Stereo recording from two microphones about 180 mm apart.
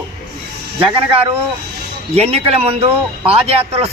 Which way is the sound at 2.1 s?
35° right (ahead or behind).